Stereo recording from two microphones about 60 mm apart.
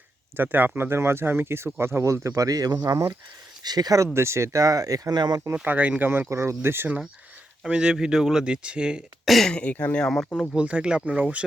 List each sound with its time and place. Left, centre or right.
0.3 s speech: right
3.8 s speech: right
4.1 s speech: right
5.6 s speech: right
6.2 s speech: right
6.6 s speech: right
7.7 s speech: centre
9.2 s speech: centre
9.5 s speech: left
9.9 s speech: centre
10.5 s speech: right